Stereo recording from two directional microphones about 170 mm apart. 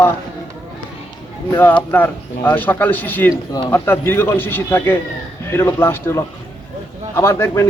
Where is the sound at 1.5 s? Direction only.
15° left (ahead or behind).